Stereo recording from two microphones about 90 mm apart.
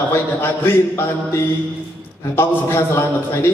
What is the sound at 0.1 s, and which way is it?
A man's voice, 25° left (ahead or behind).